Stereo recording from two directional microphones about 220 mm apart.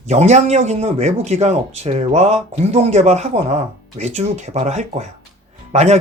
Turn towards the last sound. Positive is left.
turn(degrees=-30)  # may be behind; listen again after turning